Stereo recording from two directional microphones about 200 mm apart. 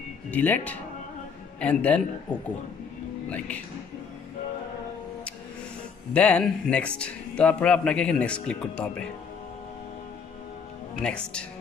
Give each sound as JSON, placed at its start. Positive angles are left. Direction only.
{"t": 0.3, "sound": "a man's voice", "side_deg": 10}
{"t": 6.1, "sound": "speech", "side_deg": 5}
{"t": 11.0, "sound": "speech", "side_deg": 5}